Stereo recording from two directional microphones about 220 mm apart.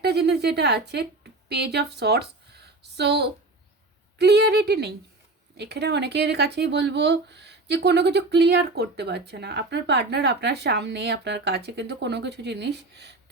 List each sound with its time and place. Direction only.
0.0 s a woman's voice: 50° right (ahead or behind)